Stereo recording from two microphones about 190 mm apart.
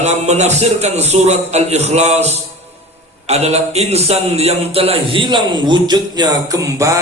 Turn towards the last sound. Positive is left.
turn(degrees=-15)  # may be behind; listen again after turning